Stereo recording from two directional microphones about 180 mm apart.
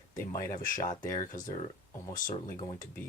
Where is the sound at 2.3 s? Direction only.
50° left (ahead or behind).